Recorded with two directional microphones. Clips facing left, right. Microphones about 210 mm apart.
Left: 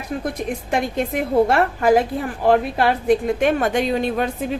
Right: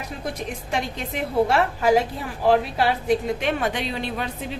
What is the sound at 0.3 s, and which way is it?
A woman's voice, 55° left (ahead or behind).